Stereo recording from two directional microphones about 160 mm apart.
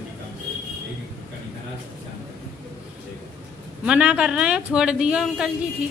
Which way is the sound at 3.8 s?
5° right (ahead or behind).